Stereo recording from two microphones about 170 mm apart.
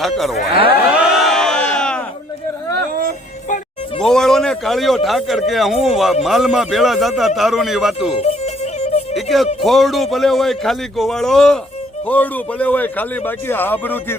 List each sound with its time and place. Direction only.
0.9 s crowd: 5° right (ahead or behind)
4.0 s a man's voice: 5° left (ahead or behind)
8.1 s speech: 35° left (ahead or behind)
8.8 s music: 35° left (ahead or behind)
9.1 s a man's voice: centre (ahead or behind)